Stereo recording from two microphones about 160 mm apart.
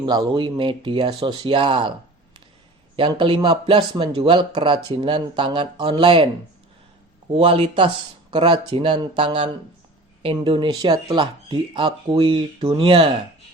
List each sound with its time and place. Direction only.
0.0 s speech: 25° right (ahead or behind)
2.9 s speech: 30° right (ahead or behind)
7.3 s speech: 40° right (ahead or behind)